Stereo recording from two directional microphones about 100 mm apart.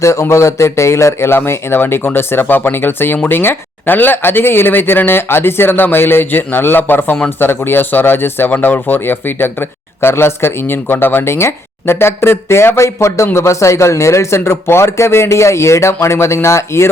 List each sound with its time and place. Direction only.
0.0 s speech: 30° left (ahead or behind)